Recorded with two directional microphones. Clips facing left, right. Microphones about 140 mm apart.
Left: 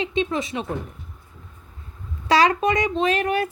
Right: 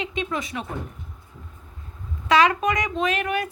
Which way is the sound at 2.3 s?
35° left (ahead or behind).